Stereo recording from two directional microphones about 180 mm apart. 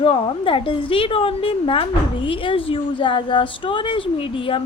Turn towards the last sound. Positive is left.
turn(degrees=30)  # may be behind; listen again after turning